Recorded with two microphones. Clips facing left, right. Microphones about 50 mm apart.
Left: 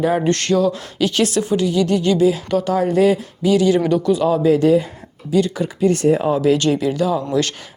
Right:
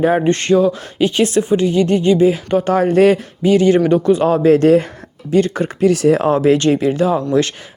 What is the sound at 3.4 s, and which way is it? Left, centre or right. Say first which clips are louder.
Speech: right 3 dB; right.